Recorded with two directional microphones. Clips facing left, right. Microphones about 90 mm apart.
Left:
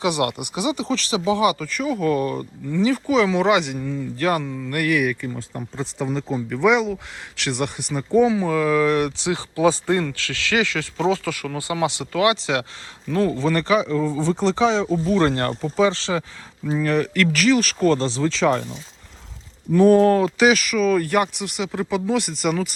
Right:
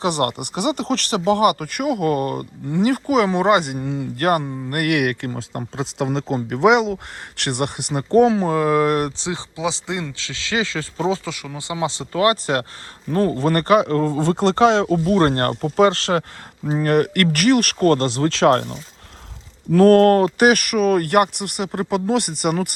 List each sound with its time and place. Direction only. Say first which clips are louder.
0.0 s speech: right 1 dB; 45° right (ahead or behind)
4.4 s speech: right 1 dB; 30° right (ahead or behind)
4.7 s speech: right 1 dB; 60° right (ahead or behind)
8.4 s speech: right 1 dB; 45° right (ahead or behind)
9.6 s speech: left 8 dB; 20° right (ahead or behind); by 18.7 s 65° right (ahead or behind)
19.7 s speech: right 2 dB; 80° right
20.4 s speech: right 2 dB; 55° right (ahead or behind)